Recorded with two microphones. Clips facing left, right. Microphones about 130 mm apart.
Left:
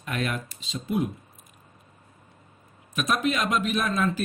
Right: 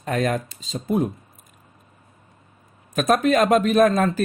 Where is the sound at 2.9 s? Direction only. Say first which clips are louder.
Right 8 dB; 50° right (ahead or behind).